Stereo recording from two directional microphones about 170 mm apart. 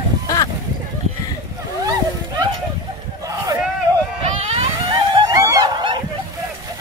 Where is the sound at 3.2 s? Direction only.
20° right (ahead or behind).